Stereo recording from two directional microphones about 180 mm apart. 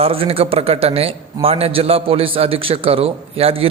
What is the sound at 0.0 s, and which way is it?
A man's voice, 30° right (ahead or behind).